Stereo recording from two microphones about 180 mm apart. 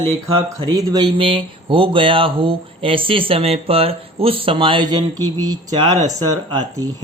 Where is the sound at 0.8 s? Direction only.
25° right (ahead or behind).